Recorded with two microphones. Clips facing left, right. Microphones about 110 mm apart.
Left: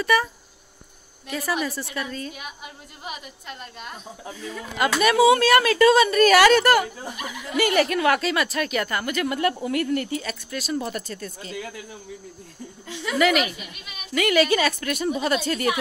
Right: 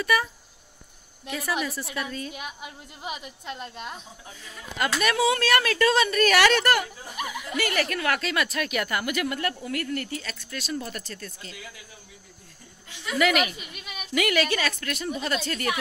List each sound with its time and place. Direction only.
0.0 s speech: centre (ahead or behind)
1.3 s speech: centre (ahead or behind)
2.3 s a woman's voice: 15° right (ahead or behind)
5.0 s speech: 10° left (ahead or behind)
7.5 s speech: 15° left (ahead or behind)
8.3 s speech: centre (ahead or behind)
9.3 s speech: 15° left (ahead or behind)
13.2 s speech: centre (ahead or behind)